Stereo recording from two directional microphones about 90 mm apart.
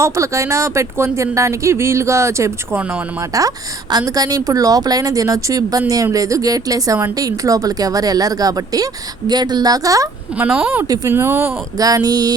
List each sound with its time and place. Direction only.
0.0 s speech: 35° right (ahead or behind)
2.7 s speech: 15° right (ahead or behind)
3.2 s speech: 40° right (ahead or behind)
10.3 s speech: 20° right (ahead or behind)
10.8 s speech: 40° right (ahead or behind)
11.1 s speech: 25° right (ahead or behind)
11.8 s speech: 45° right (ahead or behind)